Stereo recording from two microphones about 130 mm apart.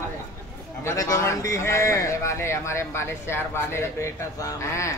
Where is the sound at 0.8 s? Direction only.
25° left (ahead or behind).